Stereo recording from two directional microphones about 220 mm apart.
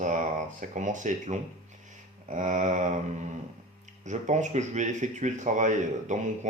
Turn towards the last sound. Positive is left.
turn(degrees=-35)  # may be behind; listen again after turning